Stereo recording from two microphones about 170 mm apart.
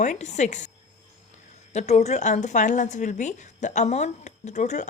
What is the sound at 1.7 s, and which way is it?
A woman's voice, 40° left (ahead or behind).